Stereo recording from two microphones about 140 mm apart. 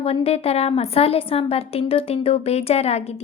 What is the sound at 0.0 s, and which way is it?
A woman's voice, 45° left (ahead or behind).